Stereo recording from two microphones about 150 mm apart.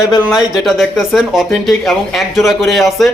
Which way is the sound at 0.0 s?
Centre (ahead or behind).